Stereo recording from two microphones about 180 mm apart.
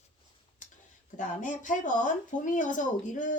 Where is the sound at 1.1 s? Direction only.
45° left (ahead or behind).